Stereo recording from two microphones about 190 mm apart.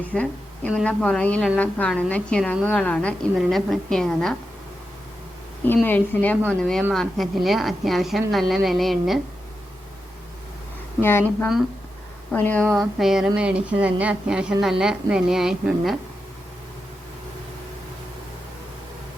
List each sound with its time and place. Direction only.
0.1 s a woman's voice: 5° left (ahead or behind)
5.6 s a woman's voice: 10° left (ahead or behind)
11.0 s a woman's voice: 10° left (ahead or behind)
12.6 s speech: 15° right (ahead or behind)
13.0 s a woman's voice: centre (ahead or behind)